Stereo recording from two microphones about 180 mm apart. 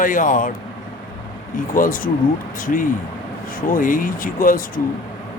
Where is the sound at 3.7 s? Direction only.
50° left (ahead or behind).